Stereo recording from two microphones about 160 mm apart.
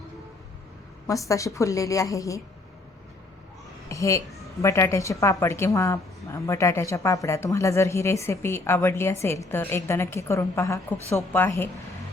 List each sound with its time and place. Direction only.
1.0 s a woman's voice: 20° left (ahead or behind)
3.8 s a sound: 20° left (ahead or behind)
4.6 s a woman's voice: 15° left (ahead or behind)